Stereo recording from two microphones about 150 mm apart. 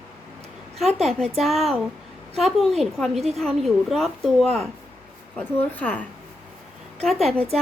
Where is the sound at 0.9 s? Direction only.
45° right (ahead or behind).